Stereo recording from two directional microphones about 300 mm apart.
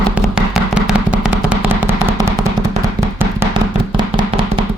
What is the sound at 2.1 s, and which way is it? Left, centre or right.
Firecracker, centre.